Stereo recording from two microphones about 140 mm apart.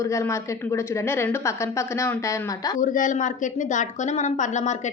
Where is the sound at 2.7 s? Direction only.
65° left (ahead or behind).